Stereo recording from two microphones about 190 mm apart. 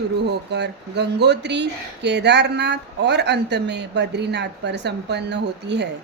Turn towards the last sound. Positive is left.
turn(degrees=-65)  # may be behind; listen again after turning